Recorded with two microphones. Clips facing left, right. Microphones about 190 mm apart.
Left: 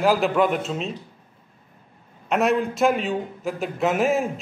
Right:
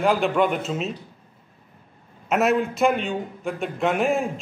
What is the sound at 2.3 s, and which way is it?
A man's voice, centre (ahead or behind).